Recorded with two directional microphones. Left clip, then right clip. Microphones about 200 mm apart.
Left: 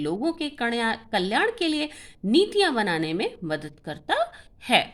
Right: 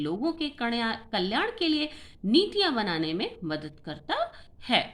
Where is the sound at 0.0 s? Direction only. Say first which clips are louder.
Left 3 dB; 45° left (ahead or behind).